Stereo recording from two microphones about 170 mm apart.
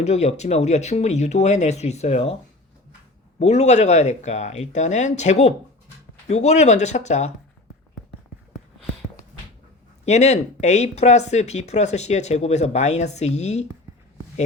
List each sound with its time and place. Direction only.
0.0 s speech: 40° left (ahead or behind)
10.1 s speech: 40° left (ahead or behind)